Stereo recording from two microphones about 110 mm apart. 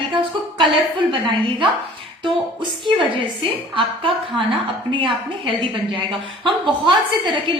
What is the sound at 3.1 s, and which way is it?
A woman's voice, 55° right (ahead or behind).